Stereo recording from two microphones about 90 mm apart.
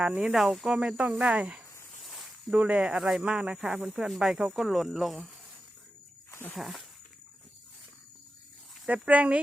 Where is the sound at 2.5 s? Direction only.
15° right (ahead or behind).